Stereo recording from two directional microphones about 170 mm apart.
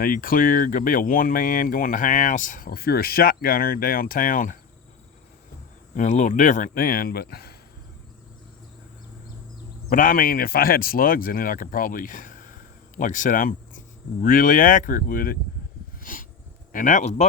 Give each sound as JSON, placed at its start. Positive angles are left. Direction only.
{"t": 0.0, "sound": "speech", "side_deg": 55}
{"t": 6.0, "sound": "speech", "side_deg": 45}
{"t": 9.8, "sound": "speech", "side_deg": 55}
{"t": 16.0, "sound": "a sound", "side_deg": 55}
{"t": 16.7, "sound": "speech", "side_deg": 50}